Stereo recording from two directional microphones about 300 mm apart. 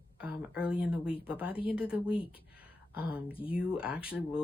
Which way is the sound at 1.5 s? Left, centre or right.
Centre.